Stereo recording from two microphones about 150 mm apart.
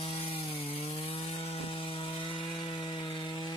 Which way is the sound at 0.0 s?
40° left (ahead or behind).